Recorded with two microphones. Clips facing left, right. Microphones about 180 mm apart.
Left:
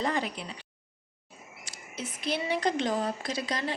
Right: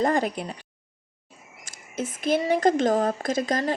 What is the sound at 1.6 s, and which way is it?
Speech, 50° right (ahead or behind).